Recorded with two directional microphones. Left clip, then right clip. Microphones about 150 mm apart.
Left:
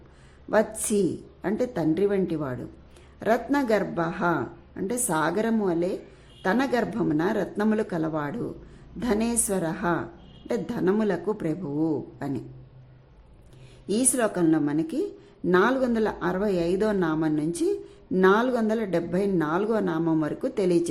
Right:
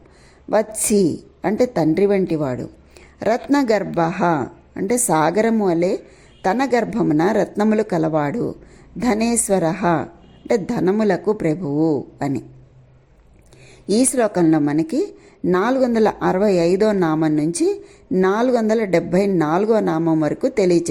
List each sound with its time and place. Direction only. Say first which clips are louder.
0.5 s a woman's voice: right 6 dB; 30° right (ahead or behind)
13.8 s a woman's voice: right 8 dB; 35° right (ahead or behind)